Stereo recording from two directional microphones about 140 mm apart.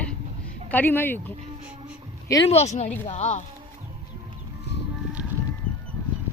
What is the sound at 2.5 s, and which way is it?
Speech, 50° left (ahead or behind).